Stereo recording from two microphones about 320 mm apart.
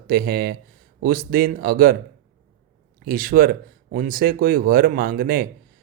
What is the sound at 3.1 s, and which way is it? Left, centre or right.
Speech, right.